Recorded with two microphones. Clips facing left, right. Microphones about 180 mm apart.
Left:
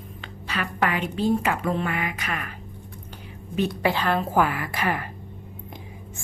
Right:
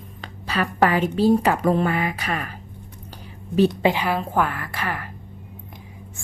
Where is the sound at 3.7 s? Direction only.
15° right (ahead or behind).